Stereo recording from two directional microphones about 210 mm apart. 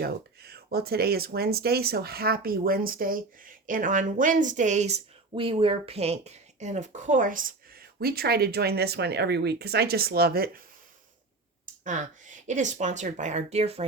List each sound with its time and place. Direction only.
0.0 s speech: 50° right (ahead or behind)
11.6 s speech: 35° right (ahead or behind)